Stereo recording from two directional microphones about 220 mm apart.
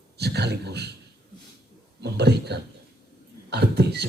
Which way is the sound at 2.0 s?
50° right (ahead or behind).